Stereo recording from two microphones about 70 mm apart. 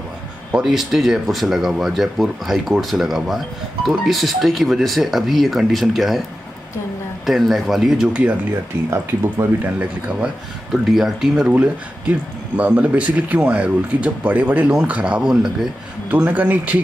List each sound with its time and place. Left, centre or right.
0.5 s speech: centre
7.2 s speech: centre
9.2 s speech: right
10.7 s speech: centre
11.4 s speech: centre
16.2 s speech: right